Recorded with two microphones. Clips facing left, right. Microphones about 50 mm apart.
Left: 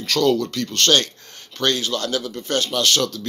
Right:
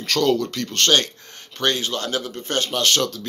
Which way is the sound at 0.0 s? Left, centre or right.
Right.